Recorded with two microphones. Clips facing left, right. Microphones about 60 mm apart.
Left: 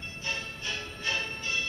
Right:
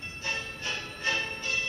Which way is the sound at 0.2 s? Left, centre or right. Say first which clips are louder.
Right 1 dB; right.